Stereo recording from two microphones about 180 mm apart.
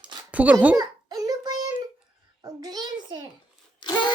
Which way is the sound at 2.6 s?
25° right (ahead or behind).